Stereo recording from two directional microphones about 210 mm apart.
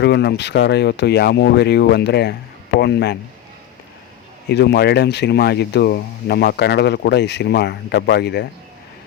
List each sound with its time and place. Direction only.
0.0 s speech: 50° left (ahead or behind)
4.4 s speech: 55° left (ahead or behind)